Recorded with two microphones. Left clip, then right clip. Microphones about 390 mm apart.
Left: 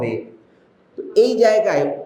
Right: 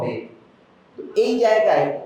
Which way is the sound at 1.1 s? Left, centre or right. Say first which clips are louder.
Left 3 dB; left.